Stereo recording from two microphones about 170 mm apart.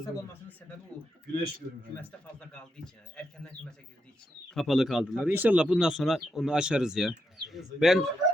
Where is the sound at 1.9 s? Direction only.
10° left (ahead or behind).